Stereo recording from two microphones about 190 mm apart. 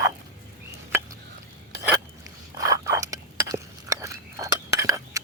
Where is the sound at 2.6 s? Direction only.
15° right (ahead or behind).